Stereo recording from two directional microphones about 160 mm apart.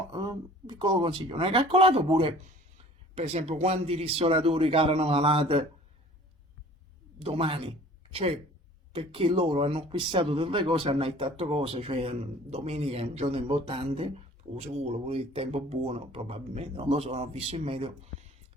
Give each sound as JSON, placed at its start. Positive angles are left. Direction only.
{"t": 0.1, "sound": "speech", "side_deg": -25}
{"t": 7.2, "sound": "speech", "side_deg": -35}